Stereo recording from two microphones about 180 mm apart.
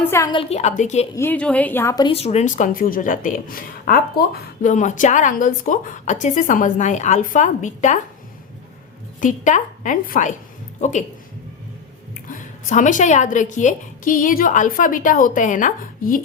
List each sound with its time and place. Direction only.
0.0 s a woman's voice: 15° left (ahead or behind)
0.3 s a woman's voice: 30° left (ahead or behind)
0.6 s a woman's voice: 40° left (ahead or behind)
1.1 s a woman's voice: 10° left (ahead or behind)
2.0 s a woman's voice: 35° left (ahead or behind); by 4.0 s 55° left (ahead or behind)
4.6 s a woman's voice: 45° left (ahead or behind)
9.2 s a woman's voice: 45° left (ahead or behind)
12.3 s a woman's voice: 45° left (ahead or behind)